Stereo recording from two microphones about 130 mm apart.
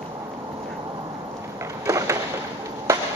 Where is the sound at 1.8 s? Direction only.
25° right (ahead or behind).